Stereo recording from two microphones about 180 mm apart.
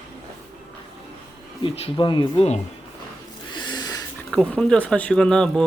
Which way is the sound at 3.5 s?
25° left (ahead or behind).